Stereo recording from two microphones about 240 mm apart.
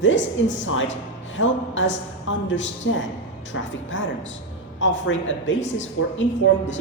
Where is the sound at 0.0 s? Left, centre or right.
Left.